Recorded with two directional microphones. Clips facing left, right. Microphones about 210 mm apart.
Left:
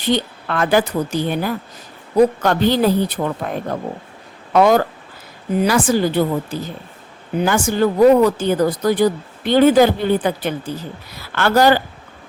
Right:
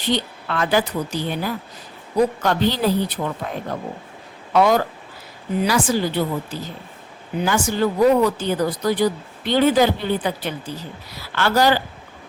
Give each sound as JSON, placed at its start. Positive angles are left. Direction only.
{"t": 0.0, "sound": "speech", "side_deg": 50}